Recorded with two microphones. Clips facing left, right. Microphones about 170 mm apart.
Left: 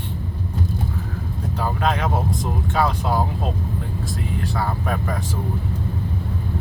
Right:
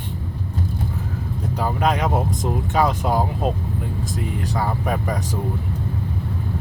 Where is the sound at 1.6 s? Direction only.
15° right (ahead or behind).